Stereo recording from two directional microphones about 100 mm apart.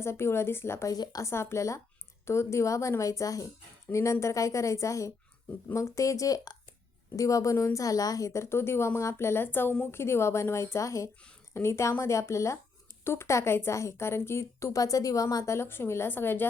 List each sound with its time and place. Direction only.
0.0 s a woman's voice: 25° left (ahead or behind)
0.9 s a woman's voice: 40° left (ahead or behind)
1.3 s a woman's voice: 25° left (ahead or behind)
15.5 s a woman's voice: 25° left (ahead or behind)